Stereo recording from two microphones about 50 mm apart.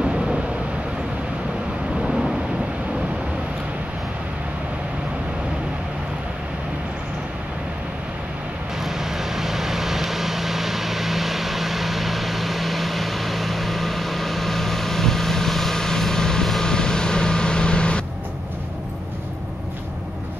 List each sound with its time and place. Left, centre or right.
0.0 s vehicle: centre
2.0 s thunder: centre
8.8 s vehicle: centre